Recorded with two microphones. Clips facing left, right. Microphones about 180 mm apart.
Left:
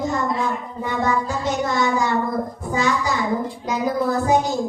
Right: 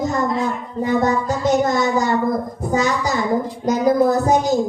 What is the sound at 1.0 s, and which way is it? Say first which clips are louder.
Child singing: right 4 dB; 40° right (ahead or behind).